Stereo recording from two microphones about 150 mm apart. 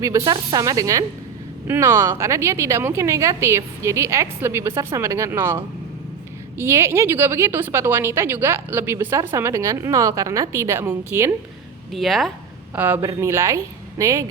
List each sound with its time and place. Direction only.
0.0 s a woman's voice: 25° right (ahead or behind)
11.9 s speech: centre (ahead or behind)
12.7 s a woman's voice: 10° right (ahead or behind)